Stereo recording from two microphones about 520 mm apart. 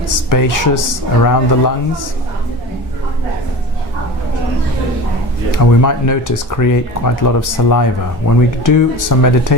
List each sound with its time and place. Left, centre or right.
0.3 s speech: left
5.5 s speech: left